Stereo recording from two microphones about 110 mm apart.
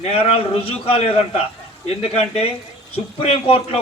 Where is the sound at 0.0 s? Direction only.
65° left (ahead or behind).